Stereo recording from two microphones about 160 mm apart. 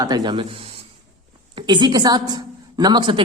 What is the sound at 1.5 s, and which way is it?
A woman's voice, 30° right (ahead or behind).